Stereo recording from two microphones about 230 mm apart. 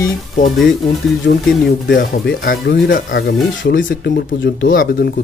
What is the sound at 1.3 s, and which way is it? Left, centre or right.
Speech, left.